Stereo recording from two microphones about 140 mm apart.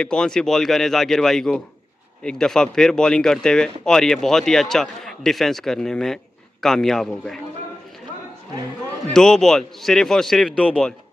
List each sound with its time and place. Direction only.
0.0 s speech: 5° left (ahead or behind)
9.1 s speech: 5° left (ahead or behind)